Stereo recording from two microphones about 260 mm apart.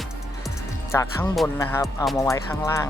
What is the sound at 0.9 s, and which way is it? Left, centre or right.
Speech, centre.